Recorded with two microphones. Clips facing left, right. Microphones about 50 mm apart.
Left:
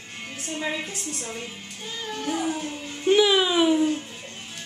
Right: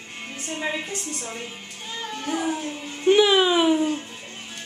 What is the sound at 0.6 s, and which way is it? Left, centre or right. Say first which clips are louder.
A woman's voice: right 1 dB; centre.